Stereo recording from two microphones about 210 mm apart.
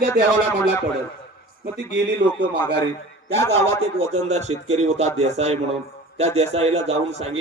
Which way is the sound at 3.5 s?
30° right (ahead or behind).